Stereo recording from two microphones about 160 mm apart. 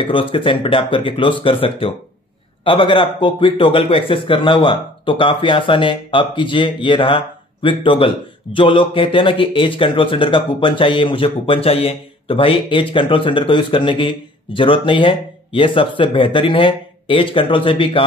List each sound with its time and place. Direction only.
0.0 s speech: 35° left (ahead or behind)